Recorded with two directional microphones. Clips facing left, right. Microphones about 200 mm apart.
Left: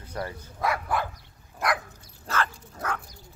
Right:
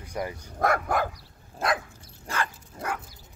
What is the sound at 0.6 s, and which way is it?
Dog, 45° right (ahead or behind).